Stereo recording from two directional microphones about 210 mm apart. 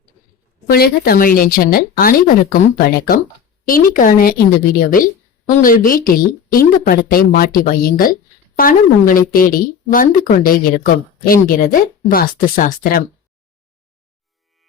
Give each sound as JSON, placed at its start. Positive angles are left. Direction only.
{"t": 0.7, "sound": "a woman's voice", "side_deg": 45}
{"t": 5.5, "sound": "a woman's voice", "side_deg": 40}